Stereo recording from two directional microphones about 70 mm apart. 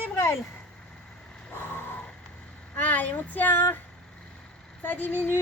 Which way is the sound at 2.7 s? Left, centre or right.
Left.